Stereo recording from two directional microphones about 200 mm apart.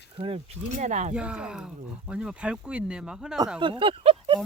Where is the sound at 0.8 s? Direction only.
35° right (ahead or behind).